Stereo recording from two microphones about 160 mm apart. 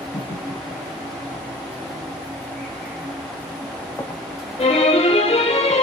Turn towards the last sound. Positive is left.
turn(degrees=40)  # may be behind; listen again after turning